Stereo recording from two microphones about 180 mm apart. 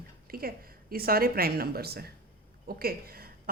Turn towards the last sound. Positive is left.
turn(degrees=-55)  # may be behind; listen again after turning